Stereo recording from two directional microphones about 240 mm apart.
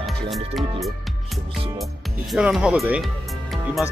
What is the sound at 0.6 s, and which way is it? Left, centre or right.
Speech, centre.